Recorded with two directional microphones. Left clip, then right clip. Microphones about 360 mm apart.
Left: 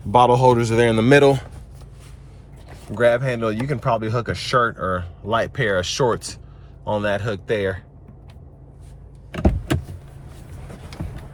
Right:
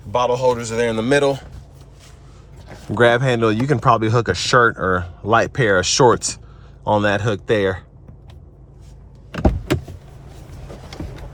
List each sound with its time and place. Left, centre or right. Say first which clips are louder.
0.1 s a man's voice: left 3 dB; centre
3.0 s speech: right 3 dB; centre